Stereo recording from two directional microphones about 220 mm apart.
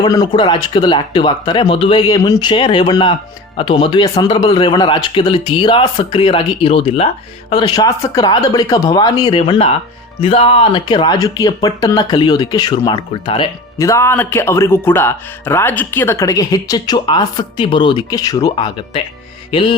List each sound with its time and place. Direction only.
0.0 s a man's voice: 20° left (ahead or behind)
19.5 s music: 25° left (ahead or behind)